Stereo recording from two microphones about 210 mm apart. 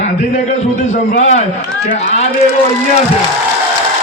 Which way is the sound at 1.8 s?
35° left (ahead or behind).